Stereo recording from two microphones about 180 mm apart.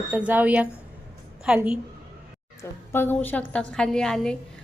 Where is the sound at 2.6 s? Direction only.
10° left (ahead or behind).